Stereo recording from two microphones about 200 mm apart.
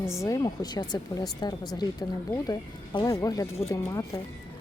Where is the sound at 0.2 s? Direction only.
20° left (ahead or behind).